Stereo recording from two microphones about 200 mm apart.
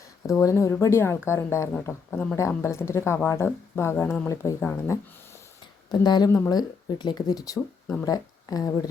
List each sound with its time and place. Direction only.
0.2 s a woman's voice: 15° left (ahead or behind)